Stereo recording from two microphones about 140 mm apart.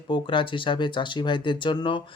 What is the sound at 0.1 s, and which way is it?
Speech, 35° left (ahead or behind).